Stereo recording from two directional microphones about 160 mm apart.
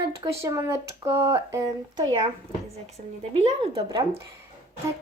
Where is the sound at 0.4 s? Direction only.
20° right (ahead or behind).